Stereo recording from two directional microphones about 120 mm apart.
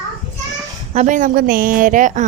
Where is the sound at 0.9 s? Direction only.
90° right.